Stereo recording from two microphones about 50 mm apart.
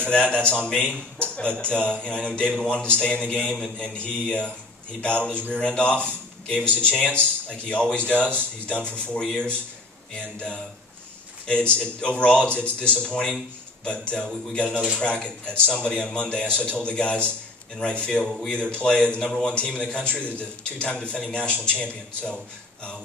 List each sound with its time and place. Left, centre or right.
0.1 s a man's voice: left
11.4 s a man's voice: left